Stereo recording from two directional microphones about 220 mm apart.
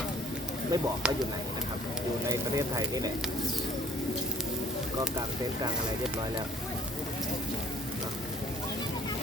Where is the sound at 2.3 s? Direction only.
15° right (ahead or behind).